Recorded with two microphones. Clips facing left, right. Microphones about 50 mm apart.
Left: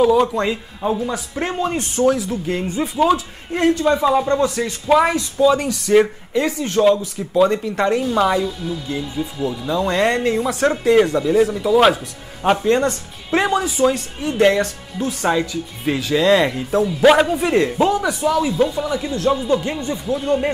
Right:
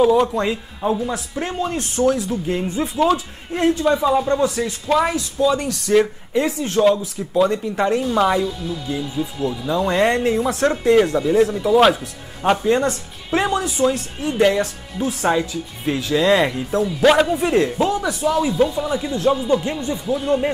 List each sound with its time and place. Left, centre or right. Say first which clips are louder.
0.0 s speech: left 1 dB; centre
1.3 s speech: left 2 dB; centre
1.8 s speech: left 1 dB; centre
4.0 s speech: left 1 dB; left
4.3 s speech: left 1 dB; centre
4.8 s speech: left 4 dB; centre
6.3 s speech: even; centre